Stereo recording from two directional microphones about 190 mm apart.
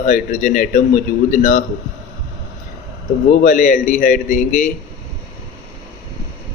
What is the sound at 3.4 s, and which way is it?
A man's voice, 45° left (ahead or behind).